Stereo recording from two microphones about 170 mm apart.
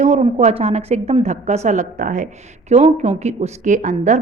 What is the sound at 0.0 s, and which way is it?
A woman's voice, 40° right (ahead or behind).